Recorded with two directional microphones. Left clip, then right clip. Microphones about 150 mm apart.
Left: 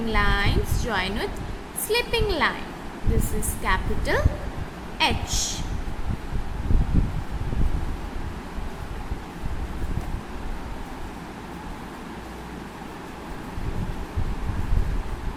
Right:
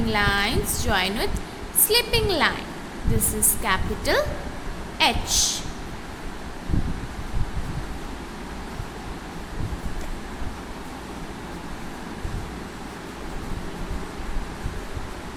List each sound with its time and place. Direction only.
0.1 s a woman's voice: 20° right (ahead or behind)
3.6 s a woman's voice: 20° right (ahead or behind)